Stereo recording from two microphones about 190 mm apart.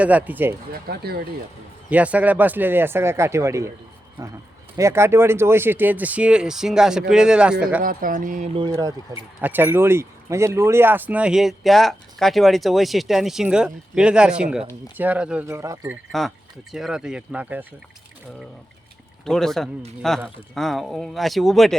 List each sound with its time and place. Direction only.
0.0 s speech: 10° right (ahead or behind)
0.7 s speech: 55° right (ahead or behind)
1.9 s speech: 5° right (ahead or behind)
4.8 s speech: 15° right (ahead or behind)
7.8 s speech: 45° right (ahead or behind)
9.4 s speech: 10° right (ahead or behind)
16.7 s speech: 5° right (ahead or behind)
19.2 s speech: centre (ahead or behind)